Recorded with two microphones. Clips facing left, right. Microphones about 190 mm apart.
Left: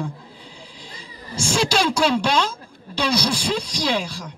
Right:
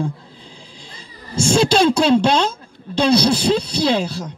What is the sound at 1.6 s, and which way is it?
Speech, 25° right (ahead or behind).